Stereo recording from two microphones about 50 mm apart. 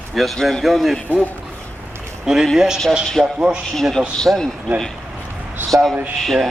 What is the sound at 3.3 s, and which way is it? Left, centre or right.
Speech, right.